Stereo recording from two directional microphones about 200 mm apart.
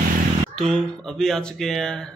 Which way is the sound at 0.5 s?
Centre (ahead or behind).